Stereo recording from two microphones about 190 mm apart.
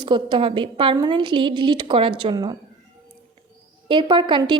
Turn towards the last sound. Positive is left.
turn(degrees=-25)  # may be behind; listen again after turning